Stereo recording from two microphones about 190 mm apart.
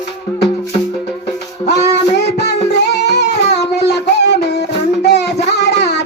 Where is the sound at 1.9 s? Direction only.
60° left (ahead or behind).